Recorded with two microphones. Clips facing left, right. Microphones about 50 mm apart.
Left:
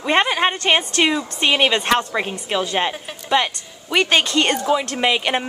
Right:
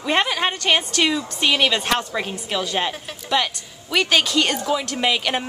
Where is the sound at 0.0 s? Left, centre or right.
Centre.